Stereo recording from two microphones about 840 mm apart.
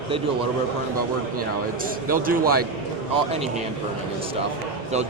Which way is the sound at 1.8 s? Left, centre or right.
Centre.